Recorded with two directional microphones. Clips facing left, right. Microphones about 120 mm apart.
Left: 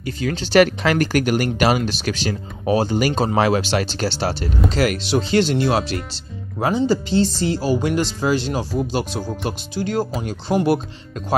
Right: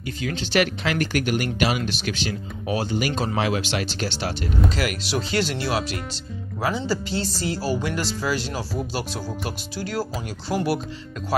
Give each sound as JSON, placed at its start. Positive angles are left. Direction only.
{"t": 0.0, "sound": "speech", "side_deg": 40}